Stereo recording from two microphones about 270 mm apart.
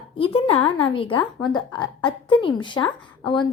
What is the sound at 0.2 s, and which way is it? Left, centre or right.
A woman's voice, left.